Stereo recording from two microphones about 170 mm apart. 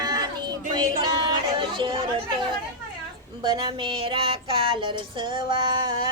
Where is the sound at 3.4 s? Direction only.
30° right (ahead or behind).